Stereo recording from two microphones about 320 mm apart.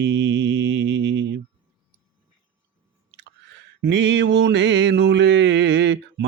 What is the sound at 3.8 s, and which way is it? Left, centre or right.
Mantra, right.